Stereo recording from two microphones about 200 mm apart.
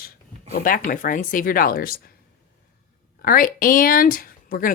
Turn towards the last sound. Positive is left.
turn(degrees=45)  # may be behind; listen again after turning